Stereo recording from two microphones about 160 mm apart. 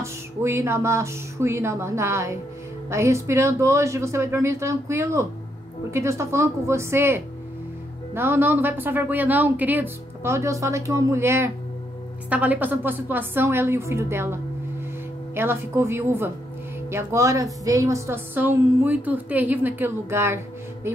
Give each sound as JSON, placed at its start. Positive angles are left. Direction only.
{"t": 0.0, "sound": "a woman's voice", "side_deg": -15}